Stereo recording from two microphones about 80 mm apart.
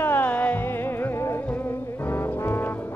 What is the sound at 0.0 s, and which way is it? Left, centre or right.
Music, left.